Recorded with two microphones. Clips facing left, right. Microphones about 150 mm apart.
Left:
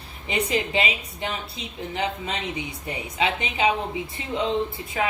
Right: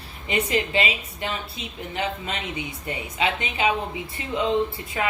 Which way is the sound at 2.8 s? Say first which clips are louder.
Even; 25° left (ahead or behind).